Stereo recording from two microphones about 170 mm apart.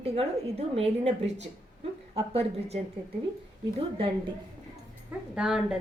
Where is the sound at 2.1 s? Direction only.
35° right (ahead or behind).